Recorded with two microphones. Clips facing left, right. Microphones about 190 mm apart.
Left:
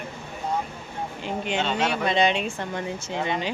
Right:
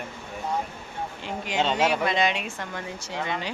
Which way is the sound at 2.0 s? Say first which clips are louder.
Left 3 dB; 25° left (ahead or behind).